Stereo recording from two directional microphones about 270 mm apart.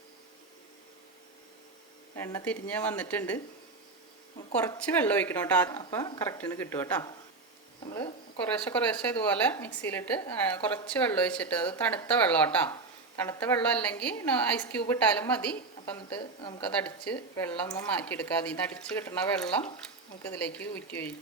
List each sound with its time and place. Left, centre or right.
2.1 s speech: centre
4.5 s speech: centre
8.5 s speech: centre
16.4 s a woman's voice: centre
16.8 s speech: centre